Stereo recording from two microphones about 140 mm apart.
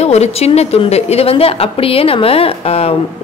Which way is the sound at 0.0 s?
50° left (ahead or behind).